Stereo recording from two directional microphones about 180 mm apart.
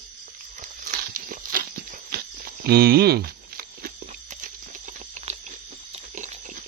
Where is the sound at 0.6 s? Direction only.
45° right (ahead or behind).